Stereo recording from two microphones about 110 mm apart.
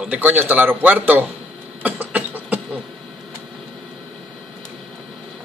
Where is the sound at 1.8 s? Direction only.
15° right (ahead or behind).